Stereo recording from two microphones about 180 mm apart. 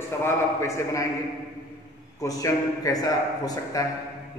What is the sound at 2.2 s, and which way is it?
A man's voice, 20° left (ahead or behind).